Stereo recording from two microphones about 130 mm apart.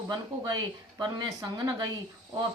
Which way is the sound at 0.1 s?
35° right (ahead or behind).